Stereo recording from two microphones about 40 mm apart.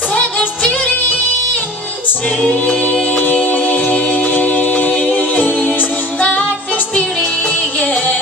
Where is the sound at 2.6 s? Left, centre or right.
Left.